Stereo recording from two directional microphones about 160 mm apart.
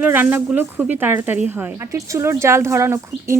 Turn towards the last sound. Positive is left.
turn(degrees=-15)  # may be behind; listen again after turning